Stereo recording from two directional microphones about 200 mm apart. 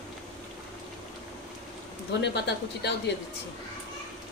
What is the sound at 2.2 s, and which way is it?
Speech, 55° left (ahead or behind).